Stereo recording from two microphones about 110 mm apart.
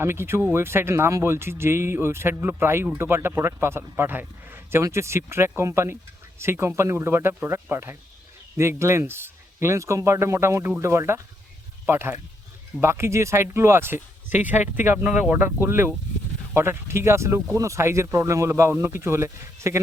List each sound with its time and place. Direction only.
0.0 s speech: 25° right (ahead or behind)